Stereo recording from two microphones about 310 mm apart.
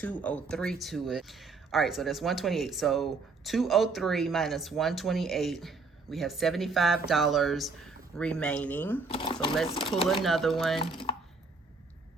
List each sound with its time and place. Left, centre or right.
0.0 s speech: centre
9.0 s speech: centre
10.2 s speech: centre
10.8 s speech: centre